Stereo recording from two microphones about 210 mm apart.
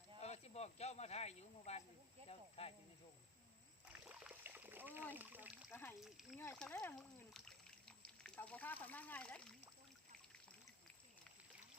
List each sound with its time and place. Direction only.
0.2 s snake: 30° left (ahead or behind)
2.6 s speech: 25° left (ahead or behind)
3.8 s splash: 5° right (ahead or behind)
5.1 s speech: 10° right (ahead or behind)
7.3 s a sound: 5° left (ahead or behind)